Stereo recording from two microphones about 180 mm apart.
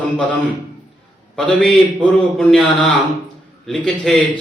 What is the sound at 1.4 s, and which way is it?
A man's voice, 5° left (ahead or behind).